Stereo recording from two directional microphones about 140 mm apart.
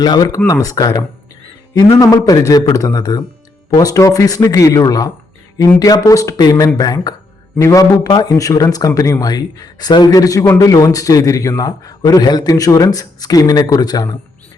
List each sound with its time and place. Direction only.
0.0 s a man's voice: 30° left (ahead or behind)